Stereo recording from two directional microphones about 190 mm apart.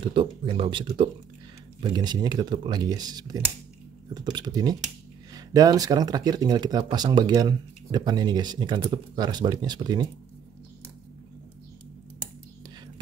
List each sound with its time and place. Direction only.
0.1 s speech: 25° right (ahead or behind)